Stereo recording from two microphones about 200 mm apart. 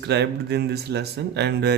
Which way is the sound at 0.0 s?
55° right (ahead or behind).